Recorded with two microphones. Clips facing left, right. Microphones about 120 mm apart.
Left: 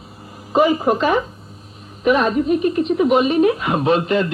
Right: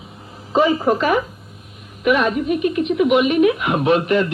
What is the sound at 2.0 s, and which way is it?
A man's voice, 35° left (ahead or behind).